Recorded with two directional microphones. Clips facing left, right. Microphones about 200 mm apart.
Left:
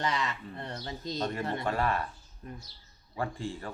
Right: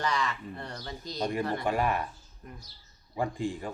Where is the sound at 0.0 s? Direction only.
20° left (ahead or behind).